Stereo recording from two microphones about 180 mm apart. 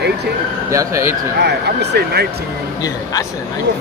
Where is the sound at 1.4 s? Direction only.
70° right (ahead or behind).